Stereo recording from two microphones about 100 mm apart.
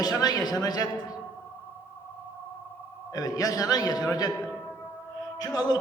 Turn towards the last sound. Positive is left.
turn(degrees=40)  # may be behind; listen again after turning